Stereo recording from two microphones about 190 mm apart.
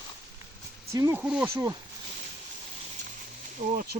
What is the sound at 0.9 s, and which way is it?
Speech, 15° right (ahead or behind).